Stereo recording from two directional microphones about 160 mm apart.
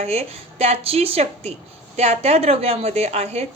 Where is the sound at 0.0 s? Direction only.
40° right (ahead or behind).